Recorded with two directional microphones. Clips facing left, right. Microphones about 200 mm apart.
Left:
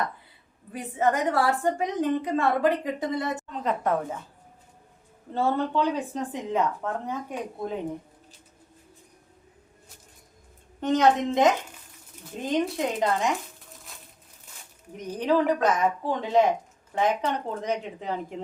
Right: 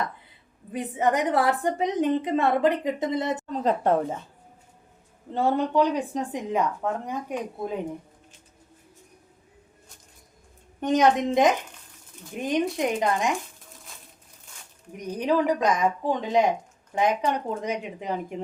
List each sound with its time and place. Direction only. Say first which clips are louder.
0.7 s a woman's voice: right 1 dB; 20° right (ahead or behind)
3.4 s a woman's voice: right 4 dB; 35° right (ahead or behind)
5.3 s a woman's voice: right 2 dB; 15° right (ahead or behind)
10.8 s a woman's voice: right 1 dB; 15° right (ahead or behind)
14.9 s a woman's voice: even; 15° right (ahead or behind)